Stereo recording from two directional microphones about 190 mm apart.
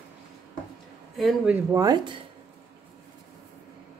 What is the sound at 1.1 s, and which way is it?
Speech, 5° right (ahead or behind).